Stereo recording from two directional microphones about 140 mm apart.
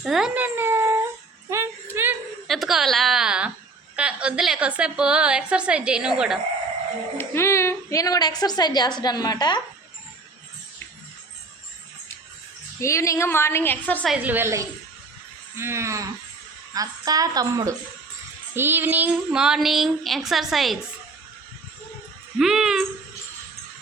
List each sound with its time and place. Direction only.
0.0 s speech: 5° right (ahead or behind)
0.4 s speech: 15° right (ahead or behind)
1.5 s music: 20° right (ahead or behind)
2.5 s a woman's voice: centre (ahead or behind)
7.2 s a woman's voice: 20° left (ahead or behind)
12.8 s a woman's voice: 20° left (ahead or behind)
14.1 s a woman's voice: 10° right (ahead or behind)
18.5 s speech: 15° right (ahead or behind)
22.4 s a sound: 5° right (ahead or behind)